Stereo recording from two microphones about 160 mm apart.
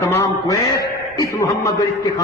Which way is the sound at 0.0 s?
20° left (ahead or behind).